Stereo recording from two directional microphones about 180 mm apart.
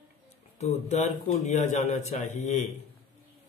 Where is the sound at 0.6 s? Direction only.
40° left (ahead or behind).